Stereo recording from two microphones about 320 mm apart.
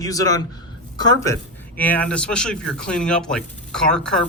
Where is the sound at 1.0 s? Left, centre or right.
Centre.